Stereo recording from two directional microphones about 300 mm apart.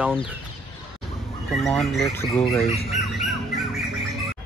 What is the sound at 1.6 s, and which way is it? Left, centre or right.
Speech, centre.